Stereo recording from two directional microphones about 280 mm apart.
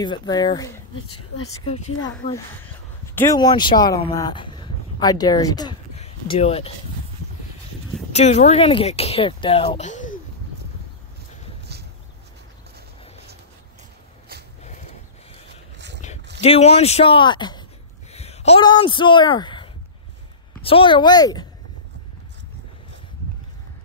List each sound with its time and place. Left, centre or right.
0.0 s speech: centre
2.2 s speech: centre
8.1 s speech: left
15.4 s a sound: right
16.3 s speech: left